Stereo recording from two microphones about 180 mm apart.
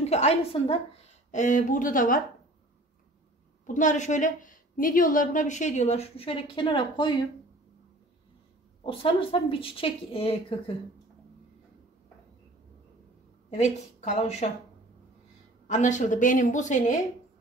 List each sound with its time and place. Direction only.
0.0 s a woman's voice: 35° left (ahead or behind)
3.6 s a woman's voice: 45° left (ahead or behind); by 7.2 s 25° left (ahead or behind)
8.8 s a woman's voice: 30° left (ahead or behind)
13.5 s a woman's voice: 40° left (ahead or behind)
15.6 s a woman's voice: 40° left (ahead or behind)